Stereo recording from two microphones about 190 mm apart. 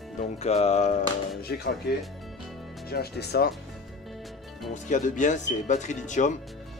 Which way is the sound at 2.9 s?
55° left (ahead or behind).